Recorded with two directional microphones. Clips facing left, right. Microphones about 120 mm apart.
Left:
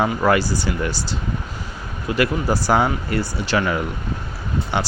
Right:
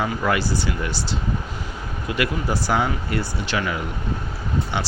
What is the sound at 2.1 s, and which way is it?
Speech, 40° left (ahead or behind).